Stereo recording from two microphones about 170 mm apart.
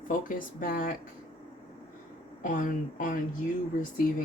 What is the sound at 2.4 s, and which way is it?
Speech, 50° left (ahead or behind).